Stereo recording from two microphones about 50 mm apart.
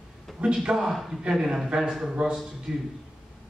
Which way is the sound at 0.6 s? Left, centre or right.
Centre.